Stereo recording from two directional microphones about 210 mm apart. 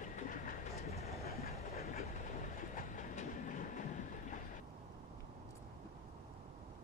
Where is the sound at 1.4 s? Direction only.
45° left (ahead or behind).